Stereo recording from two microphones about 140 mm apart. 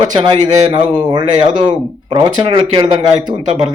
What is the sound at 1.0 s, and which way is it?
Speech, 35° right (ahead or behind).